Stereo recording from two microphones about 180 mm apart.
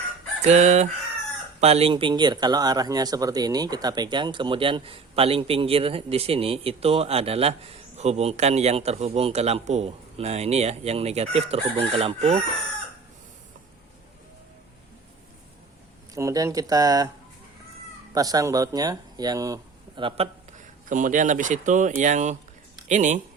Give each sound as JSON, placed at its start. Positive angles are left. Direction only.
{"t": 0.4, "sound": "speech", "side_deg": -40}
{"t": 16.1, "sound": "speech", "side_deg": -20}
{"t": 18.1, "sound": "speech", "side_deg": -20}
{"t": 20.8, "sound": "speech", "side_deg": -45}